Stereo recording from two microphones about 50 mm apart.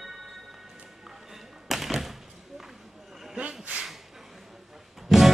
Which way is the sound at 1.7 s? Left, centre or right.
Centre.